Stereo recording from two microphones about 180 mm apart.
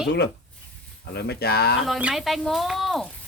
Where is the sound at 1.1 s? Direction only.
65° left (ahead or behind).